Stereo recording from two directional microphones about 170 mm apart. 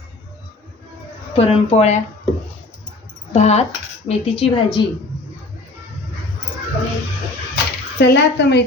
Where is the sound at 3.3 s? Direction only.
40° left (ahead or behind).